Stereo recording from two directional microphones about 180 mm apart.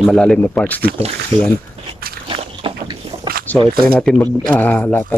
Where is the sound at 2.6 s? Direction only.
20° right (ahead or behind).